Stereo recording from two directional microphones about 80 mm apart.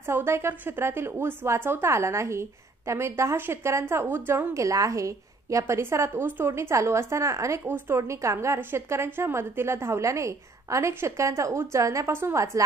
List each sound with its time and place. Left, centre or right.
0.0 s a woman's voice: right
7.6 s speech: right
8.0 s a woman's voice: right